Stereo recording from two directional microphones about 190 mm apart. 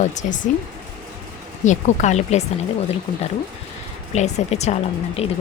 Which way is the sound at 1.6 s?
40° left (ahead or behind).